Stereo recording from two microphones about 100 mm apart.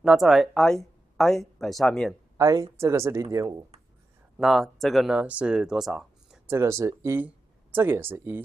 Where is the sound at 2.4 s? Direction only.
35° right (ahead or behind).